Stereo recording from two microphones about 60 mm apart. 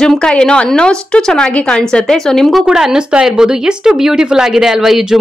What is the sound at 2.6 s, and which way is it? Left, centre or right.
Speech, centre.